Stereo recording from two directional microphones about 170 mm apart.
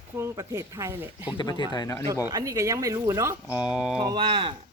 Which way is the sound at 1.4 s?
25° left (ahead or behind).